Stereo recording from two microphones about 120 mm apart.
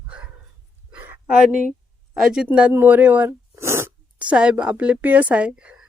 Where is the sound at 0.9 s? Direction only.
10° right (ahead or behind).